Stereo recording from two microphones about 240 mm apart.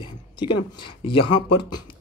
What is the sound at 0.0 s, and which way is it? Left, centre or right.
Speech, centre.